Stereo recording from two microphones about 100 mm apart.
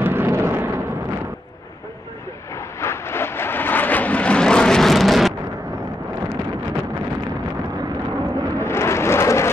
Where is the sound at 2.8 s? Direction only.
25° left (ahead or behind); by 5.3 s centre (ahead or behind).